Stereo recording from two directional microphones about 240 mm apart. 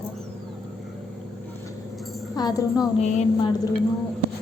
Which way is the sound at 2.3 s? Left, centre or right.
Centre.